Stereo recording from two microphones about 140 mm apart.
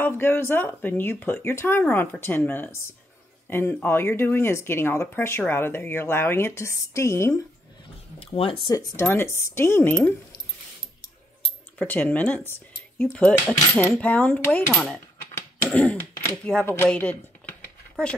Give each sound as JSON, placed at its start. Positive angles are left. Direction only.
{"t": 0.0, "sound": "speech", "side_deg": 15}
{"t": 8.2, "sound": "speech", "side_deg": 45}
{"t": 8.7, "sound": "speech", "side_deg": 20}
{"t": 11.8, "sound": "speech", "side_deg": 10}
{"t": 14.7, "sound": "speech", "side_deg": 0}
{"t": 15.3, "sound": "throat clearing", "side_deg": 10}
{"t": 16.6, "sound": "speech", "side_deg": 15}